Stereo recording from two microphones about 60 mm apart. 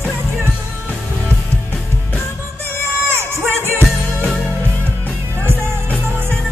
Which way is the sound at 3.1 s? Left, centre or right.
Right.